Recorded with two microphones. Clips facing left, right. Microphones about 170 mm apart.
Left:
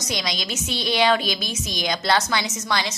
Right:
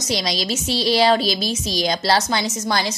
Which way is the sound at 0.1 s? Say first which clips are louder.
Right 6 dB; 35° right (ahead or behind).